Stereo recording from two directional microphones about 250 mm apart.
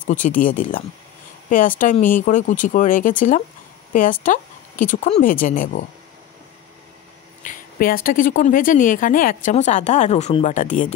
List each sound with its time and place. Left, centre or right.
0.0 s speech: left
7.4 s speech: left